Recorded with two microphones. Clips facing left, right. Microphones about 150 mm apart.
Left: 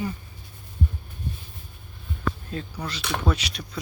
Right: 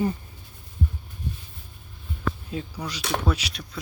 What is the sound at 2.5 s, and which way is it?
Speech, 10° right (ahead or behind).